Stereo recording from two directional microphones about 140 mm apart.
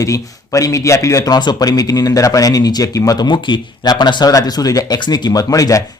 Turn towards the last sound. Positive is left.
turn(degrees=25)  # may be behind; listen again after turning